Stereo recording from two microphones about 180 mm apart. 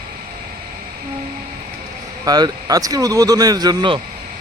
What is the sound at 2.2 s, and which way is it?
Speech, 20° right (ahead or behind).